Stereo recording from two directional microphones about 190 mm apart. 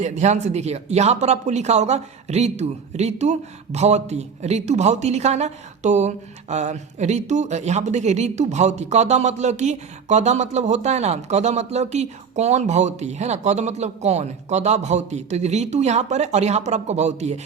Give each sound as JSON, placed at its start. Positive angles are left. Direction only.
{"t": 0.0, "sound": "speech", "side_deg": -35}